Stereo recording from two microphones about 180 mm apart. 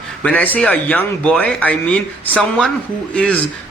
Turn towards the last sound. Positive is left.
turn(degrees=5)  # may be behind; listen again after turning